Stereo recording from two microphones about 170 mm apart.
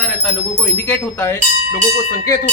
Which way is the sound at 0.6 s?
10° left (ahead or behind).